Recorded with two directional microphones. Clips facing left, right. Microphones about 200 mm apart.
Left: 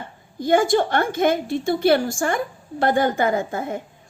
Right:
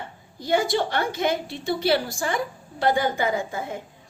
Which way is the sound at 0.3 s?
50° left (ahead or behind).